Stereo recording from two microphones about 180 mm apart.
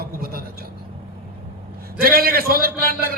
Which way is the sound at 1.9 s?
55° right (ahead or behind).